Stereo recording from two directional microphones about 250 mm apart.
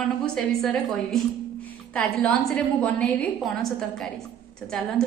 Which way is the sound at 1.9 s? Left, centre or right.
Centre.